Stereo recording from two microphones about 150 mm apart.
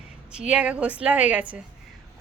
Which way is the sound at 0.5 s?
10° right (ahead or behind).